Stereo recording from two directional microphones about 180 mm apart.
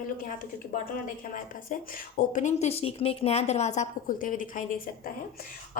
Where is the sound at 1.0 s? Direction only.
45° left (ahead or behind).